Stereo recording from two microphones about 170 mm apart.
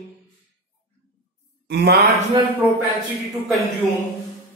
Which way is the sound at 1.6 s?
75° right (ahead or behind).